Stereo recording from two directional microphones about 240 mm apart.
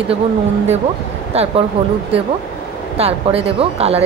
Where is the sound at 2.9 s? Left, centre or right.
Right.